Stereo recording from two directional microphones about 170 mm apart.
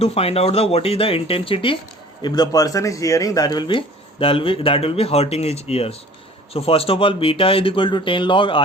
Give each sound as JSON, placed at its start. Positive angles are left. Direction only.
{"t": 0.0, "sound": "speech", "side_deg": 35}